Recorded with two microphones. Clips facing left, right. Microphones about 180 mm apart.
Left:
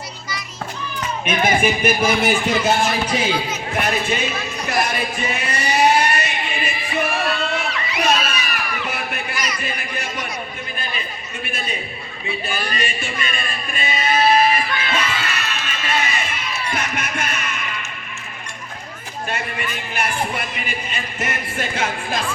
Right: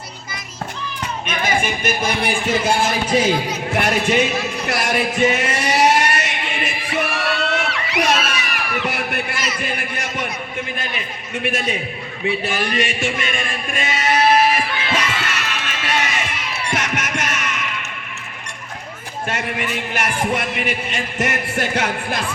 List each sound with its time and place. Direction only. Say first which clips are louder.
1.6 s speech: left 4 dB; 5° left (ahead or behind)
3.8 s a man's voice: right 4 dB; 75° right (ahead or behind)
4.7 s vehicle: right 1 dB; 80° right
9.6 s a man's voice: right 2 dB; 70° right (ahead or behind)
11.4 s a man's voice: right 9 dB; 85° right
12.2 s a sound: right 5 dB; 75° right (ahead or behind)
16.7 s music: right 4 dB; 80° right
19.3 s a man's voice: right 3 dB; 70° right (ahead or behind)